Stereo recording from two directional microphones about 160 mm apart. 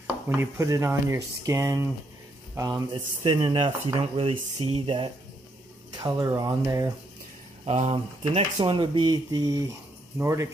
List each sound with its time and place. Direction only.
0.0 s speech: 15° right (ahead or behind)
7.6 s speech: 40° right (ahead or behind); by 10.5 s 15° right (ahead or behind)